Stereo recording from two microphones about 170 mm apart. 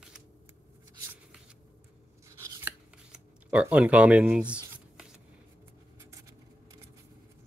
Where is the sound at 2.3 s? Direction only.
15° right (ahead or behind).